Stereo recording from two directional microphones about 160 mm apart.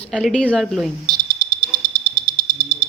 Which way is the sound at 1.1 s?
25° right (ahead or behind).